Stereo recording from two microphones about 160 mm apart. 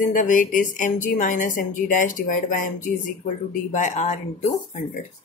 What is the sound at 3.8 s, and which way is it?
Speech, 45° left (ahead or behind).